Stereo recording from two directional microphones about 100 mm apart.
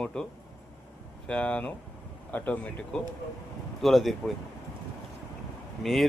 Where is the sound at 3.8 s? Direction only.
Centre (ahead or behind).